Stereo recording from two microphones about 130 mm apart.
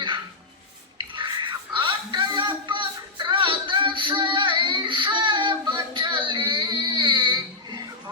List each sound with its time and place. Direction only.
0.9 s a sound: 40° right (ahead or behind)
1.7 s music: 40° right (ahead or behind)
3.2 s child singing: 40° right (ahead or behind)